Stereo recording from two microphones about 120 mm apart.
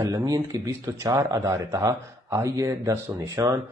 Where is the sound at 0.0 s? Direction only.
30° right (ahead or behind).